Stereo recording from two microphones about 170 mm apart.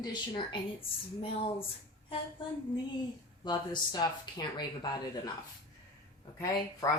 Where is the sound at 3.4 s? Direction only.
25° left (ahead or behind).